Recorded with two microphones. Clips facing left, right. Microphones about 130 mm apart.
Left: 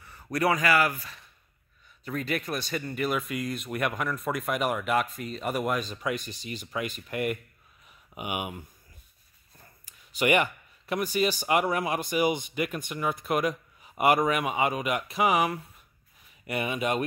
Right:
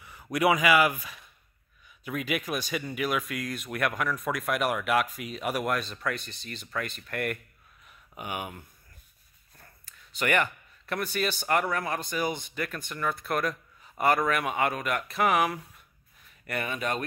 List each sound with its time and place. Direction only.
0.0 s speech: 10° right (ahead or behind); by 7.3 s 5° left (ahead or behind)
7.8 s a sound: 10° left (ahead or behind)
10.1 s speech: 10° left (ahead or behind)